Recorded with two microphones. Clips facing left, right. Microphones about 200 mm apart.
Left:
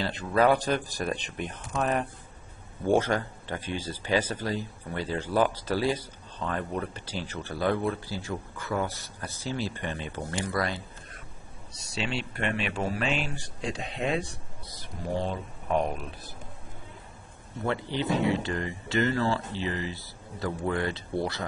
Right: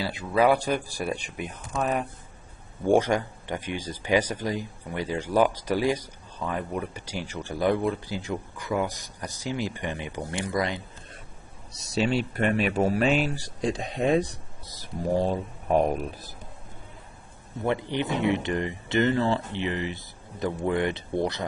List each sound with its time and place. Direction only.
0.0 s speech: 10° right (ahead or behind)
11.9 s a man's voice: 40° right (ahead or behind)
17.6 s speech: 20° right (ahead or behind)